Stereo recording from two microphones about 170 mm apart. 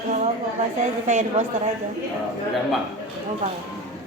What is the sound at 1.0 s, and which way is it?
Speech, 45° right (ahead or behind).